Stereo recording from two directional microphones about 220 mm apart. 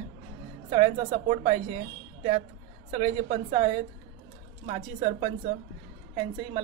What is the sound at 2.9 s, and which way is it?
A woman's voice, 30° right (ahead or behind).